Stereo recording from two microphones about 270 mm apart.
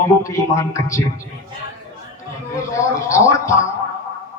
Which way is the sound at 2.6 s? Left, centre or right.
Centre.